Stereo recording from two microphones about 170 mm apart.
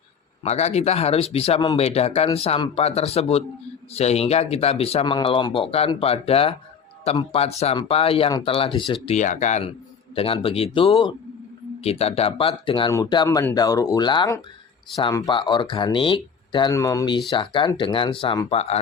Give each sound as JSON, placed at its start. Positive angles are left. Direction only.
{"t": 0.4, "sound": "speech", "side_deg": 40}
{"t": 9.0, "sound": "speech", "side_deg": 45}
{"t": 10.2, "sound": "speech", "side_deg": 35}